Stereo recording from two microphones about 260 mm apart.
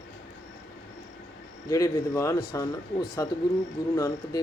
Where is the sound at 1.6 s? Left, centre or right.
Centre.